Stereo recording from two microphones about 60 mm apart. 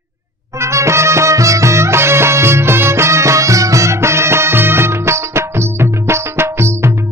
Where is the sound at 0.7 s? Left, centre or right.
Right.